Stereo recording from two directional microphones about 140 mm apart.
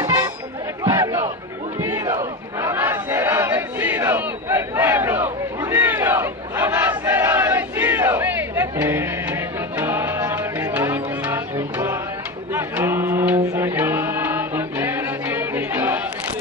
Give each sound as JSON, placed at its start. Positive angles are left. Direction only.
{"t": 0.0, "sound": "music", "side_deg": -25}
{"t": 0.8, "sound": "a sound", "side_deg": -25}
{"t": 1.8, "sound": "battle cry", "side_deg": -20}
{"t": 12.5, "sound": "mantra", "side_deg": -15}